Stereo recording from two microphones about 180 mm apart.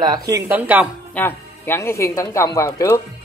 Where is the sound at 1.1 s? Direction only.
10° left (ahead or behind).